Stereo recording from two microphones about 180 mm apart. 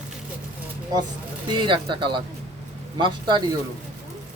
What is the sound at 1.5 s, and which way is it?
Speech, 25° right (ahead or behind).